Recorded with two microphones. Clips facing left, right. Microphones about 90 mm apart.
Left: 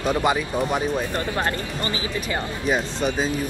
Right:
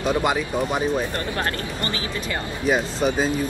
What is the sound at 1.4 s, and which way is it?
Speech, 20° left (ahead or behind).